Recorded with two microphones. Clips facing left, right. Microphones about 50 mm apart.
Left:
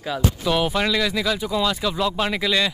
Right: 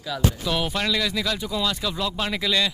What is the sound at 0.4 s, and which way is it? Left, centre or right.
Speech, centre.